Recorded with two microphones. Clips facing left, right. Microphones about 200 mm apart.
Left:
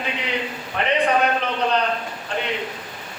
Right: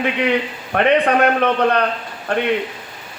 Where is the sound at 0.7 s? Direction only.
60° right (ahead or behind).